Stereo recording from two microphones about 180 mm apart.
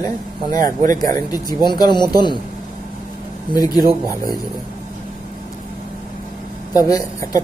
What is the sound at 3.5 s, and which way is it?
Speech, 20° left (ahead or behind).